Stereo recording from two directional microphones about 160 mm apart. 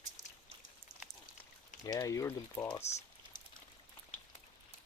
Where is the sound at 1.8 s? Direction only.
20° left (ahead or behind).